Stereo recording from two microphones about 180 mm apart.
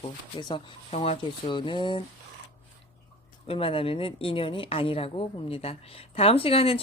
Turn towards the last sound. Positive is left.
turn(degrees=30)  # may be behind; listen again after turning